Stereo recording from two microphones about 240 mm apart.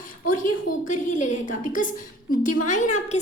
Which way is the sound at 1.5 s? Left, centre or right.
Left.